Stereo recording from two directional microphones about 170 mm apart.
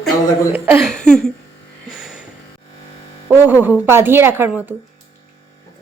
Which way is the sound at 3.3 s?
10° right (ahead or behind).